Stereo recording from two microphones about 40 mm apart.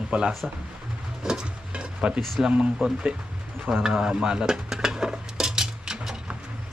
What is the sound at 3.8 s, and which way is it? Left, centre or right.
Dishes, centre.